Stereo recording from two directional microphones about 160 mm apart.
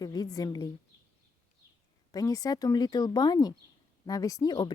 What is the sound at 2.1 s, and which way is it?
Speech, 25° left (ahead or behind).